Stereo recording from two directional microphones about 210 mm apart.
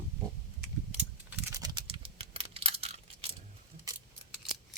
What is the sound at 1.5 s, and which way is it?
Computer keyboard, 20° right (ahead or behind).